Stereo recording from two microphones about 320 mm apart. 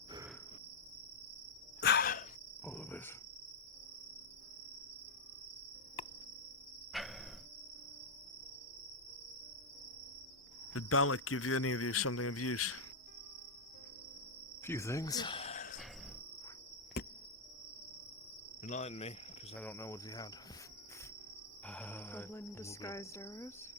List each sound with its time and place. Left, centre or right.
1.8 s cricket: left
2.6 s cricket: centre
6.0 s cricket: centre
6.9 s a sound: centre
10.8 s speech: left
14.6 s cricket: centre
16.9 s cricket: left
18.6 s insect: left
19.5 s cricket: centre
21.7 s speech: centre